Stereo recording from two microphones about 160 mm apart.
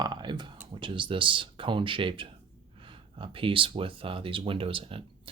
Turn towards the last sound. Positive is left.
turn(degrees=-35)  # may be behind; listen again after turning